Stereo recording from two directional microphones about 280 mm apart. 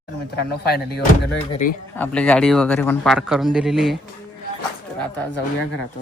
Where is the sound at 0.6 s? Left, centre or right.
Left.